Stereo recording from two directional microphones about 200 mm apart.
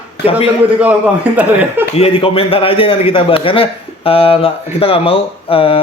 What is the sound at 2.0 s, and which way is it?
A man's voice, 30° left (ahead or behind).